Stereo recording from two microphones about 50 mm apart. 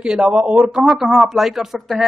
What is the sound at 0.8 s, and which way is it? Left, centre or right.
Speech, centre.